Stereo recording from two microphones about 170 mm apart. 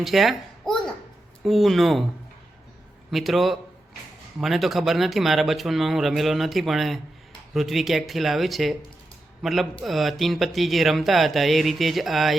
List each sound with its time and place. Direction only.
0.0 s speech: centre (ahead or behind)
3.1 s speech: centre (ahead or behind)